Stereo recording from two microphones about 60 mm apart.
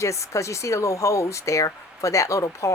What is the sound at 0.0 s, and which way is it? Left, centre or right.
Speech, left.